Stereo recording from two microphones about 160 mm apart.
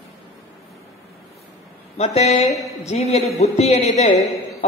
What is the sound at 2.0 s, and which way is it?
A woman's voice, 40° left (ahead or behind).